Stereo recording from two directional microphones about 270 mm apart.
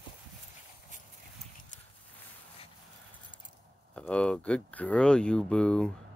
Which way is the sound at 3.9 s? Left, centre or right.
Centre.